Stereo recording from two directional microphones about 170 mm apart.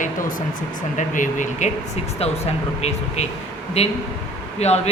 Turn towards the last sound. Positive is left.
turn(degrees=40)  # may be behind; listen again after turning